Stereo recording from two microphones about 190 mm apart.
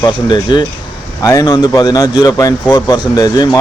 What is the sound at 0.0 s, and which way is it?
Speech, 25° left (ahead or behind).